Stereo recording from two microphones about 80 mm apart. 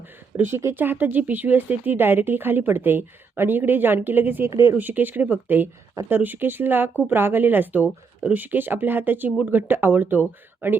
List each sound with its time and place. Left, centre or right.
0.3 s speech: right
4.4 s speech: right
4.8 s speech: right